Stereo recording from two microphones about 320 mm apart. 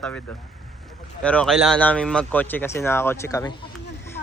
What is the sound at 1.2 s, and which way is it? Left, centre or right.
A man's voice, centre.